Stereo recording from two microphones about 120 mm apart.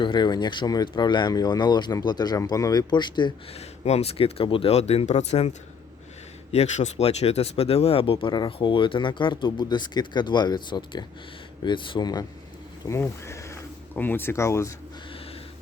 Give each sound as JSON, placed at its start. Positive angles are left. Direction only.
{"t": 0.0, "sound": "speech", "side_deg": 40}
{"t": 3.5, "sound": "speech", "side_deg": 60}
{"t": 12.8, "sound": "speech", "side_deg": 25}